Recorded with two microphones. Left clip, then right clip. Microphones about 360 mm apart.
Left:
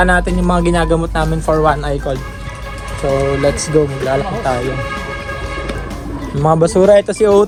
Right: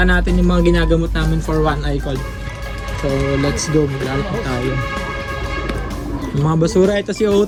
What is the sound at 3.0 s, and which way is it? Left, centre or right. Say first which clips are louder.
Speech: left 5 dB; left.